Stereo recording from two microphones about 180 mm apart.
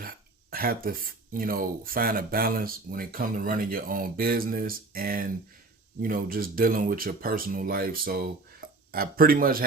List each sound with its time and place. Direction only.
0.5 s speech: 55° right (ahead or behind)